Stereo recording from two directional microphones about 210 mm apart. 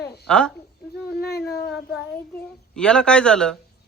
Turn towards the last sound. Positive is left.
turn(degrees=5)  # may be behind; listen again after turning